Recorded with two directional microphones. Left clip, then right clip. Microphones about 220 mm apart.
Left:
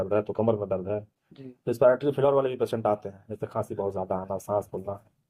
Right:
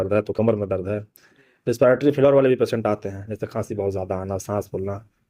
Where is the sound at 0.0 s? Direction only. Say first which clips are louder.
Right 5 dB; 50° right (ahead or behind).